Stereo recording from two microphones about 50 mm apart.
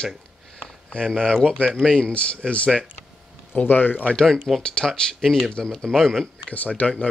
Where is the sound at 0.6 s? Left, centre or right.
Centre.